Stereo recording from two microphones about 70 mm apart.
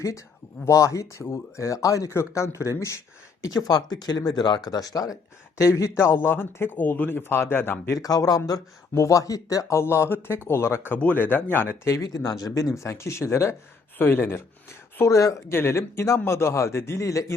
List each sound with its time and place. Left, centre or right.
0.6 s speech: left
3.4 s speech: left
5.5 s speech: left
7.9 s speech: left
9.7 s speech: left
11.9 s speech: left
12.5 s speech: left
15.5 s speech: left